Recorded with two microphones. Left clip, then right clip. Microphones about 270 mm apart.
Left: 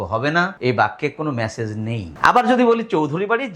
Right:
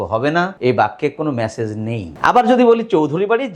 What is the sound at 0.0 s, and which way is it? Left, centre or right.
Speech, left.